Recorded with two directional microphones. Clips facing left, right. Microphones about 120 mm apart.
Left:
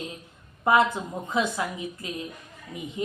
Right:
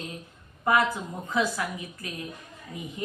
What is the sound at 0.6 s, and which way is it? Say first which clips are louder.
Speech: left 3 dB; 25° left (ahead or behind).